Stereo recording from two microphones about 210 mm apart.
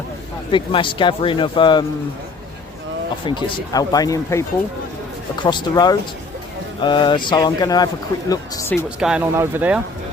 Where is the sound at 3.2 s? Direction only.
20° left (ahead or behind).